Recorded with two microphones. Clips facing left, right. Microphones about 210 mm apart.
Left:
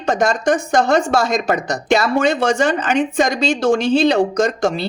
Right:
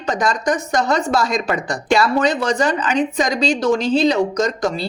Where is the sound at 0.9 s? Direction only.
50° left (ahead or behind).